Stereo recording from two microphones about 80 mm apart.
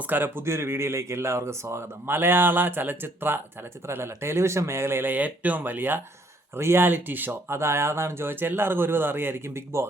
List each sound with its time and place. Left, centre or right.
0.1 s speech: right